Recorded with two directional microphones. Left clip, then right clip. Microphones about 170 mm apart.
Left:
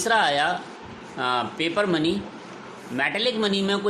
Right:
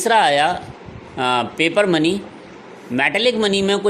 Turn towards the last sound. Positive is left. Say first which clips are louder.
# right 6 dB
turn(degrees=-40)  # may be behind; listen again after turning